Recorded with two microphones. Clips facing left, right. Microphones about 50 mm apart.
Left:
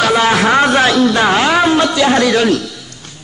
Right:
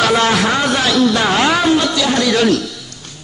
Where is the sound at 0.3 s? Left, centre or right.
Left.